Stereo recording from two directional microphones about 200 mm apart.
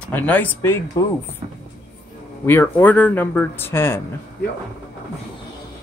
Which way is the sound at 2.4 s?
10° left (ahead or behind).